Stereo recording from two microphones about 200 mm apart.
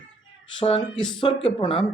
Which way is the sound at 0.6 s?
25° left (ahead or behind).